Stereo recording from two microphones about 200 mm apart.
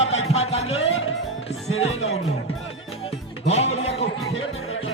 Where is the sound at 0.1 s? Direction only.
30° left (ahead or behind).